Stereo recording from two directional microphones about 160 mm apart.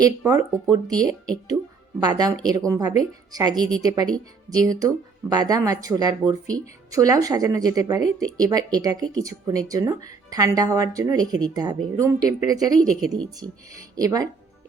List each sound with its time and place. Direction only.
0.3 s speech: 20° right (ahead or behind)
13.9 s speech: 20° right (ahead or behind)